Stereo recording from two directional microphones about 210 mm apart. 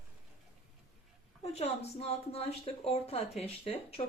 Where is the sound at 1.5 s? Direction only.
30° left (ahead or behind).